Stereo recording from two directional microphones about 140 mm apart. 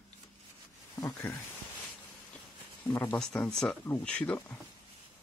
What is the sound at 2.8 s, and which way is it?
Speech, 15° left (ahead or behind).